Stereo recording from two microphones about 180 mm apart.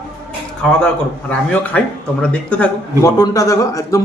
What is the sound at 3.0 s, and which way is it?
Speech, 20° left (ahead or behind).